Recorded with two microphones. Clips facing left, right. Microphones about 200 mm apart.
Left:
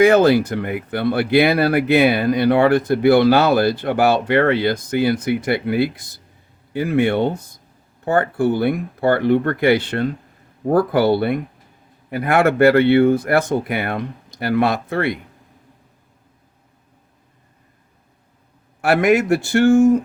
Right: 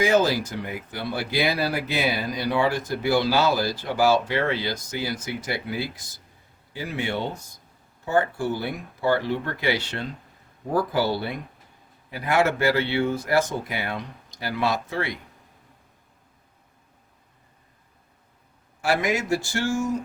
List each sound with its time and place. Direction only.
0.0 s speech: 60° left (ahead or behind)
18.8 s speech: 60° left (ahead or behind)